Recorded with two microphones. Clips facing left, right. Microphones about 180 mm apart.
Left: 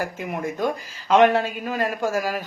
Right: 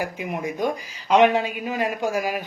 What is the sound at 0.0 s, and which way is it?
A man's voice, 15° right (ahead or behind).